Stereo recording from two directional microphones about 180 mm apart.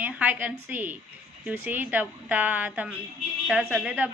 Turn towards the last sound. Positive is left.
turn(degrees=-5)  # may be behind; listen again after turning